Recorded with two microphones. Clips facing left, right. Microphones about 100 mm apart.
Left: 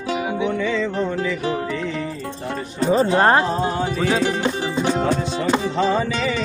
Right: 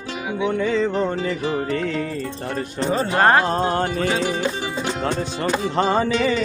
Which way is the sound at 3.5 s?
60° right (ahead or behind).